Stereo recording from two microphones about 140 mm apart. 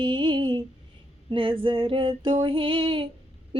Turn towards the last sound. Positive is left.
turn(degrees=-40)  # may be behind; listen again after turning